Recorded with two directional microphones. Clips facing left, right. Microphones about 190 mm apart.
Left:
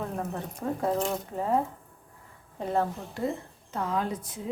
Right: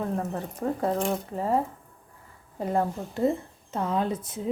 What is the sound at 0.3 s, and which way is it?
Speech, centre (ahead or behind).